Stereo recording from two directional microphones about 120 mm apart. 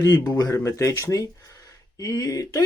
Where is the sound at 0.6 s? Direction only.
25° left (ahead or behind).